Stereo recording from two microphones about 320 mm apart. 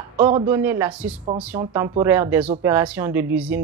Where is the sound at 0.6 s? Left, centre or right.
Centre.